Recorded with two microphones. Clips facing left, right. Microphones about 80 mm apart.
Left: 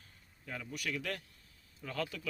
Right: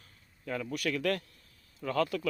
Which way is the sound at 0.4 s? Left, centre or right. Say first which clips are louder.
Right 8 dB; right.